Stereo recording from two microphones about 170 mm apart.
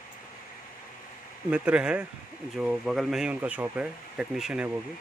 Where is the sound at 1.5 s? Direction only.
5° right (ahead or behind).